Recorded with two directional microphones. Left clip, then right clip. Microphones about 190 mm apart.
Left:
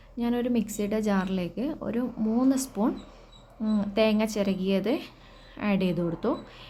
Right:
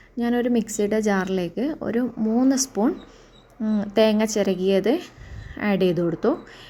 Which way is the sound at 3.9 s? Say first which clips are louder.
Right 6 dB; 20° right (ahead or behind).